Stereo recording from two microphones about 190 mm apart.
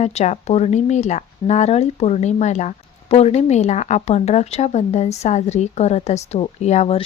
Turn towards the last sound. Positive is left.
turn(degrees=35)  # may be behind; listen again after turning